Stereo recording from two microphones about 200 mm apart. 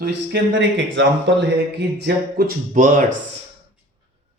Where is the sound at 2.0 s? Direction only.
50° right (ahead or behind).